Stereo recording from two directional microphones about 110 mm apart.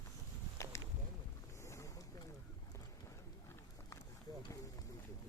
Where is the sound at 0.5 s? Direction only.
25° left (ahead or behind).